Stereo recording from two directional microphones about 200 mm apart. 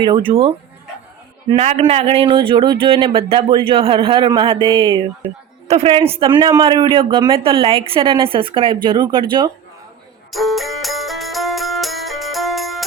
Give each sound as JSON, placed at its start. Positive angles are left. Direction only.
{"t": 0.0, "sound": "a man's voice", "side_deg": -25}
{"t": 1.5, "sound": "a man's voice", "side_deg": -30}
{"t": 10.3, "sound": "music", "side_deg": 0}